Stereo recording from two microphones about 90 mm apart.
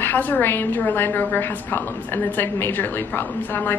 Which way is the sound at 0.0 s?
20° left (ahead or behind).